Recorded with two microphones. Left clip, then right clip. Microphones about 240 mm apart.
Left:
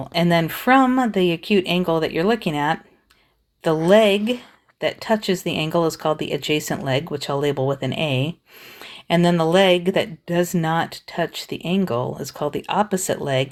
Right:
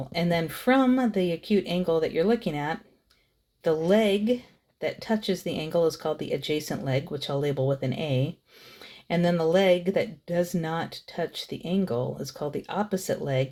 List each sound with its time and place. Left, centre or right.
0.1 s speech: left
3.8 s speech: left